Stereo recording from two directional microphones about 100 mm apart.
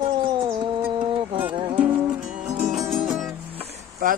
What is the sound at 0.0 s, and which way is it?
Cat, 45° right (ahead or behind).